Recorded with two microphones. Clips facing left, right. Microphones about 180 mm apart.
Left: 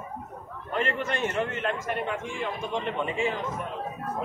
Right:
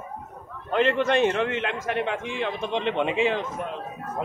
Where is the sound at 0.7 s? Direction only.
80° right.